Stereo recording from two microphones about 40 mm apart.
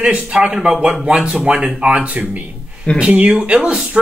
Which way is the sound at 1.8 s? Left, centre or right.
Right.